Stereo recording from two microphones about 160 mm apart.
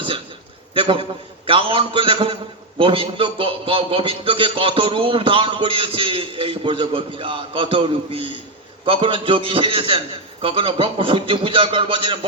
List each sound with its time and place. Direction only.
0.7 s a man's voice: 35° right (ahead or behind)